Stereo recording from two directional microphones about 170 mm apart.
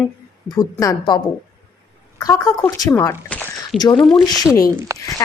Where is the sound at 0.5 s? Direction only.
20° left (ahead or behind).